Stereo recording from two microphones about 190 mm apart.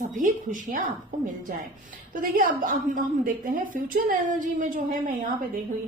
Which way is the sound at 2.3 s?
45° right (ahead or behind).